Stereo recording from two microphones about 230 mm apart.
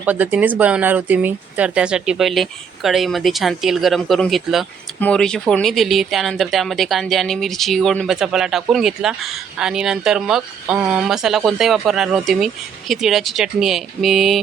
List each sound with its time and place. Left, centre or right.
0.0 s speech: centre